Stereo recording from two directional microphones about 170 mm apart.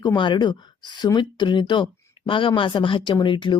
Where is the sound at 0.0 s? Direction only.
25° left (ahead or behind).